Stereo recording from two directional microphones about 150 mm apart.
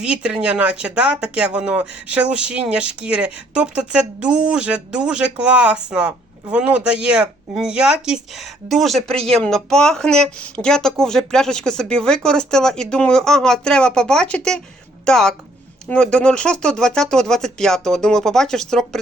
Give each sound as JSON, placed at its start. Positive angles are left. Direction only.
{"t": 0.0, "sound": "speech", "side_deg": -5}
{"t": 9.1, "sound": "speech", "side_deg": -40}
{"t": 9.4, "sound": "speech", "side_deg": 5}